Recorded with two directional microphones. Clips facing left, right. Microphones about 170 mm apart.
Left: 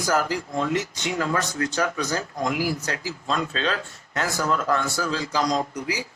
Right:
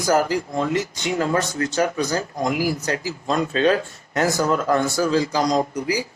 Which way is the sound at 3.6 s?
45° right (ahead or behind).